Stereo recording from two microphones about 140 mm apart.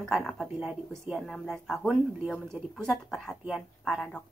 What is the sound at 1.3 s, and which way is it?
A woman's voice, 5° left (ahead or behind).